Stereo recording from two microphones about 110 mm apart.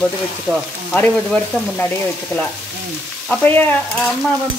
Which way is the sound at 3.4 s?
15° left (ahead or behind).